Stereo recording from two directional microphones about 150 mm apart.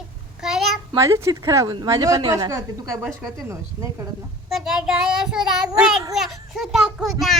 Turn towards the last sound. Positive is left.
turn(degrees=0)  # may be behind; listen again after turning